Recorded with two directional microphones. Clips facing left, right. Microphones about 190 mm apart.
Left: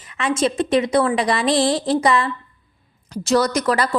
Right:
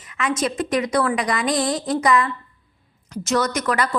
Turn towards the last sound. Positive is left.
turn(degrees=30)  # may be behind; listen again after turning